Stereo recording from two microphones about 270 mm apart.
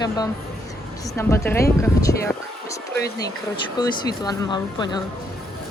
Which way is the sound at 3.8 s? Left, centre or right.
Centre.